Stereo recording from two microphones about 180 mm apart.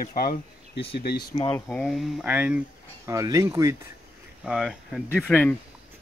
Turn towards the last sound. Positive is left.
turn(degrees=5)  # may be behind; listen again after turning